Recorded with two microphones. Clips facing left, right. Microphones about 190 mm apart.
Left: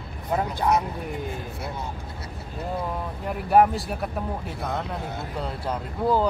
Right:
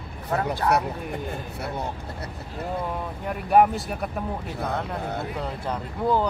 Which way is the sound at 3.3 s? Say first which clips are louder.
Even; centre (ahead or behind).